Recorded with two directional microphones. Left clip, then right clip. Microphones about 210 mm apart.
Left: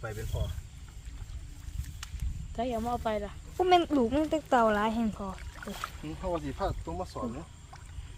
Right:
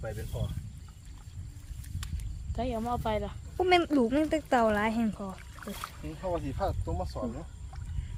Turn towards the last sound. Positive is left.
turn(degrees=0)  # may be behind; listen again after turning